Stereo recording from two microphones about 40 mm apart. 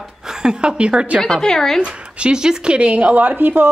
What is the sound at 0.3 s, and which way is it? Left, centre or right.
Speech, centre.